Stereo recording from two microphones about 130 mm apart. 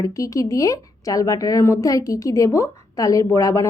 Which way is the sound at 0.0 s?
25° left (ahead or behind).